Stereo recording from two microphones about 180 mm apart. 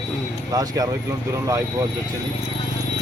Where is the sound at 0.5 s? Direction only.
20° right (ahead or behind).